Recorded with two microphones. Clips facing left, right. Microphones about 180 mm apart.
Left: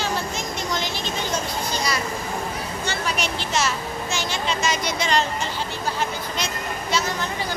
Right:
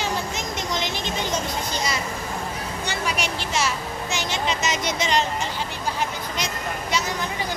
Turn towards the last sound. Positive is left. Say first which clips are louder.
# left 1 dB
turn(degrees=-15)  # may be behind; listen again after turning